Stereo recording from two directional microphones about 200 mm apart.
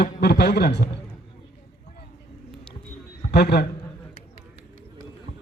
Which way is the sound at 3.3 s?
55° left (ahead or behind).